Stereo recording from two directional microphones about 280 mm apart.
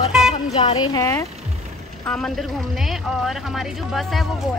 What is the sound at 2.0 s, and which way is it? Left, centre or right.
Speech, centre.